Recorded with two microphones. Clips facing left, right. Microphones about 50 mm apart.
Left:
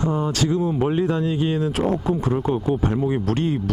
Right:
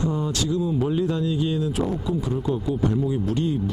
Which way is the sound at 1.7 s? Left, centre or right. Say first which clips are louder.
Left 4 dB; left.